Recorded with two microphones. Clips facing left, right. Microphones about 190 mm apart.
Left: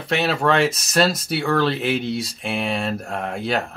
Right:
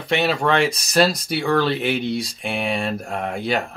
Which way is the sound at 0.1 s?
Centre (ahead or behind).